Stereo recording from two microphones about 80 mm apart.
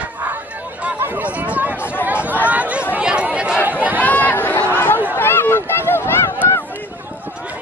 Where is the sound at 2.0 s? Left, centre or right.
Centre.